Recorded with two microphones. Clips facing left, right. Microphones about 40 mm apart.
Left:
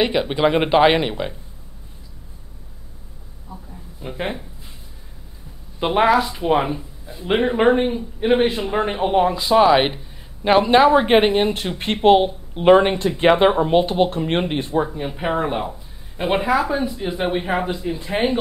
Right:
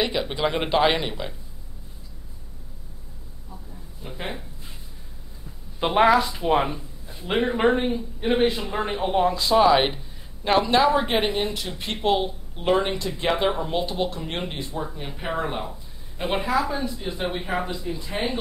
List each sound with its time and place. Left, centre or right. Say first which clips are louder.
0.0 s speech: left 6 dB; left
4.0 s speech: left 7 dB; left
5.8 s speech: left 2 dB; centre
7.2 s speech: left 5 dB; centre; by 18.3 s left